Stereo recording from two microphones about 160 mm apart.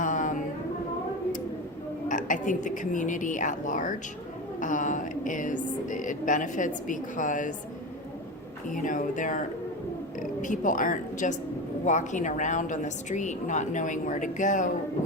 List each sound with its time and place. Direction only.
0.0 s music: 55° left (ahead or behind)
2.0 s a woman's voice: 55° left (ahead or behind)
8.7 s a woman's voice: 55° left (ahead or behind)